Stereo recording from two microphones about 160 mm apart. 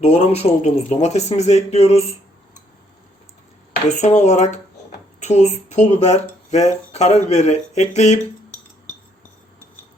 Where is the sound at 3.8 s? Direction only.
50° left (ahead or behind).